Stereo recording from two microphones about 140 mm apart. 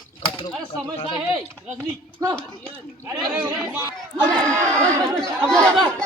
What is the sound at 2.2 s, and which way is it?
Speech, 25° right (ahead or behind).